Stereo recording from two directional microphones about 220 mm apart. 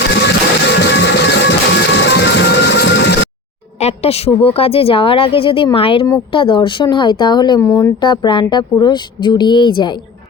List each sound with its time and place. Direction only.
0.1 s music: 50° left (ahead or behind)
3.8 s speech: 30° left (ahead or behind)